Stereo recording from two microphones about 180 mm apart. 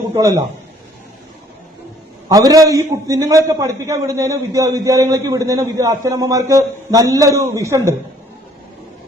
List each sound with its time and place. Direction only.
0.1 s a man's voice: 20° right (ahead or behind)
2.3 s a man's voice: 20° right (ahead or behind)